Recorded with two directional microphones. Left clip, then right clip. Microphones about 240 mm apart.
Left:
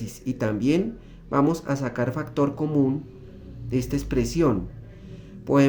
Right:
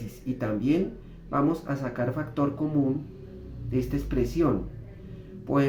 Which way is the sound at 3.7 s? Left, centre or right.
Left.